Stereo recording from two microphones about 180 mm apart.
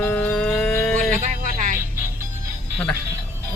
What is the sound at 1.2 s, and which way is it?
Music, 45° right (ahead or behind).